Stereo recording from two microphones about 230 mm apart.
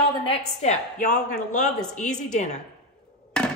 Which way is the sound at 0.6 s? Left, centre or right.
Left.